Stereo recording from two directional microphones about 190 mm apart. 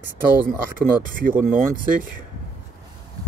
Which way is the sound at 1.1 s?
45° right (ahead or behind).